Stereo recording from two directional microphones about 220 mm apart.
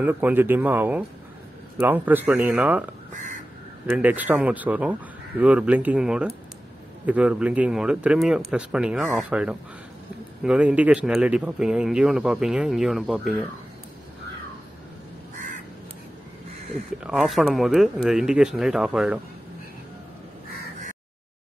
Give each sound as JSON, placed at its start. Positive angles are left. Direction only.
{"t": 0.0, "sound": "speech", "side_deg": -10}
{"t": 3.9, "sound": "speech", "side_deg": -5}
{"t": 15.3, "sound": "crow", "side_deg": -35}
{"t": 17.0, "sound": "speech", "side_deg": -5}